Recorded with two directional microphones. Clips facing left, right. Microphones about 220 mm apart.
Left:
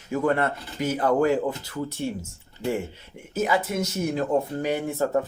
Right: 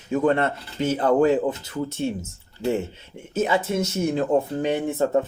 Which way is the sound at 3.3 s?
25° right (ahead or behind).